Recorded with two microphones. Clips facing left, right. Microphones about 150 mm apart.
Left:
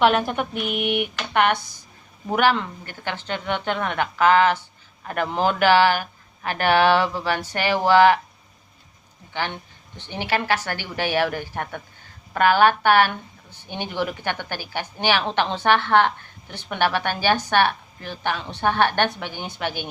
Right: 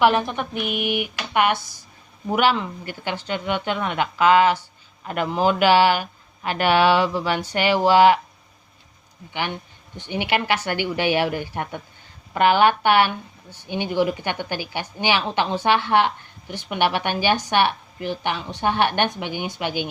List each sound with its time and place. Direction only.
0.0 s speech: centre (ahead or behind)
2.3 s speech: 45° left (ahead or behind)
2.6 s a woman's voice: 15° right (ahead or behind)
6.5 s speech: 45° left (ahead or behind)
7.0 s a woman's voice: 15° right (ahead or behind)
10.0 s a woman's voice: 15° right (ahead or behind)
14.0 s a woman's voice: 15° right (ahead or behind)